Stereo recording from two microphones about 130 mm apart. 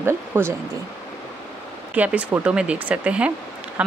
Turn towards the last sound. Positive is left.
turn(degrees=-10)  # may be behind; listen again after turning